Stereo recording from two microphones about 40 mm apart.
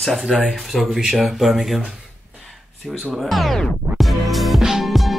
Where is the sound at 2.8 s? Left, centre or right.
Centre.